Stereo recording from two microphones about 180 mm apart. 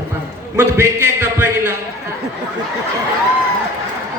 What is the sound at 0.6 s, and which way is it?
Speech, 15° right (ahead or behind).